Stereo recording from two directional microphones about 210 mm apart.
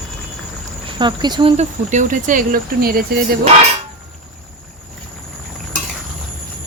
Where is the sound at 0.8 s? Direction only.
20° right (ahead or behind); by 3.3 s 45° right (ahead or behind).